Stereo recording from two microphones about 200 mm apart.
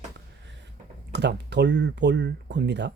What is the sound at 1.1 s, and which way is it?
Speech, 60° right (ahead or behind).